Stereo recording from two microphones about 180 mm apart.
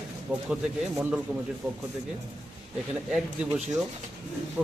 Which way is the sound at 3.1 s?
5° right (ahead or behind).